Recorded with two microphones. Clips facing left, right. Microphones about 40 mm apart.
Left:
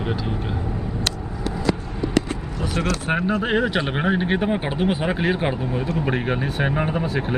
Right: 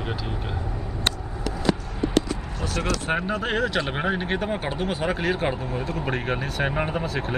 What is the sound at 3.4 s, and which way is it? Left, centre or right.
Speech, centre.